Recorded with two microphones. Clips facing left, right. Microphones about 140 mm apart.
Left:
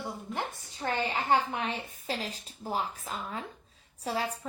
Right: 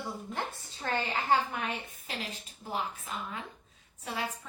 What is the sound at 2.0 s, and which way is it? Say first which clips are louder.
A woman's voice: left 7 dB; 35° left (ahead or behind).